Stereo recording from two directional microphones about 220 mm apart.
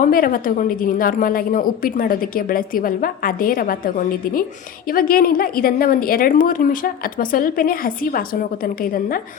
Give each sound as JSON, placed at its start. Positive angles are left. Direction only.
{"t": 0.0, "sound": "a woman's voice", "side_deg": 40}